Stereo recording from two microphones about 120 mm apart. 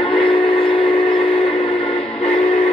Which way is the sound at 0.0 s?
45° left (ahead or behind).